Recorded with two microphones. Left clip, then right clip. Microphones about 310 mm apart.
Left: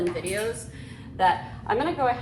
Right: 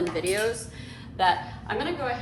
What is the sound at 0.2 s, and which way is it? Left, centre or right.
Speech, centre.